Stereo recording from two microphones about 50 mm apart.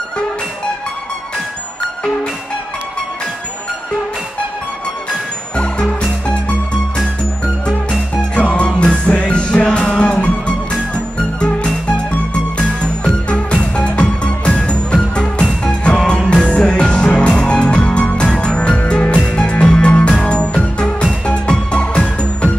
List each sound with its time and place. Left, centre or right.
5.6 s music: left
8.5 s music: centre